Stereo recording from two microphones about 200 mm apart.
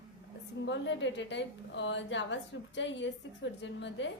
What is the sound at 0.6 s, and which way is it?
A woman's voice, 65° left (ahead or behind).